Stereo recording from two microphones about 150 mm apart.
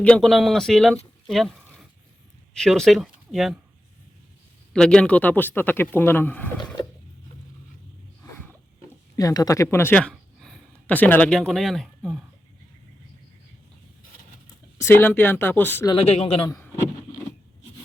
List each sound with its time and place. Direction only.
0.0 s speech: 5° left (ahead or behind)
4.7 s speech: 5° left (ahead or behind)
8.2 s a sound: 20° left (ahead or behind)
9.1 s speech: 25° left (ahead or behind)
9.6 s speech: 10° left (ahead or behind)
14.8 s speech: 15° left (ahead or behind)
15.9 s speech: 40° left (ahead or behind)